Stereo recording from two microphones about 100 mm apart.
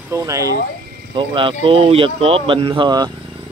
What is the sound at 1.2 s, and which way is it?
Speech, 60° right (ahead or behind).